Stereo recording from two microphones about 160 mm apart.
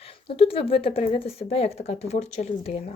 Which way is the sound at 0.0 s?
35° left (ahead or behind).